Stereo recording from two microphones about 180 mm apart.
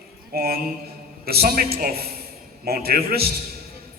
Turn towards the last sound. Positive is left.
turn(degrees=-60)  # may be behind; listen again after turning